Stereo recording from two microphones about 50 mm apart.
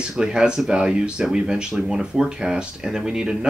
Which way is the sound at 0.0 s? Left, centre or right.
Centre.